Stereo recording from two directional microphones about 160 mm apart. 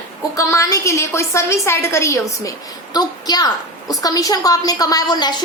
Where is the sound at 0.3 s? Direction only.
20° left (ahead or behind).